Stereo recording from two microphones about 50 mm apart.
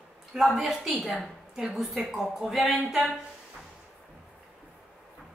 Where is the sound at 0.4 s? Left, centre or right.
Centre.